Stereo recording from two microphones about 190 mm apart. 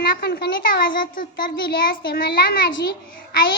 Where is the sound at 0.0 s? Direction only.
50° left (ahead or behind).